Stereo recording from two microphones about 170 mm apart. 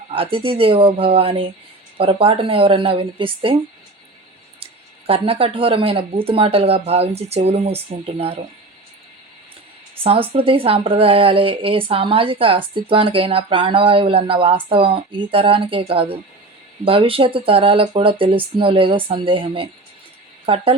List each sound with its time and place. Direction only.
0.1 s speech: 35° right (ahead or behind)
4.6 s speech: 35° right (ahead or behind)
10.0 s speech: 35° right (ahead or behind)